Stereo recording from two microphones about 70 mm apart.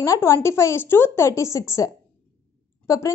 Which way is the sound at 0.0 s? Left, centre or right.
Left.